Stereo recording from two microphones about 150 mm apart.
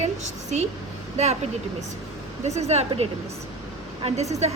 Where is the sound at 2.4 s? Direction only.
45° right (ahead or behind).